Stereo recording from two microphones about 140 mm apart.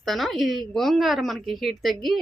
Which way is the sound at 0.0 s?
Centre (ahead or behind).